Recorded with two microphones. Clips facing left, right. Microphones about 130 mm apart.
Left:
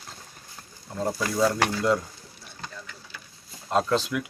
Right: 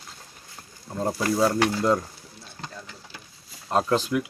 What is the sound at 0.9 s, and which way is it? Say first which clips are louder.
Speech: right 2 dB; 20° right (ahead or behind).